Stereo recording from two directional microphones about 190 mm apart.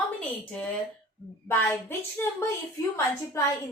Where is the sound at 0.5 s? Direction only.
5° left (ahead or behind).